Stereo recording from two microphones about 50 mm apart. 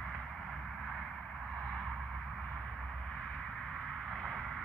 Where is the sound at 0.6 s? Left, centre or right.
Centre.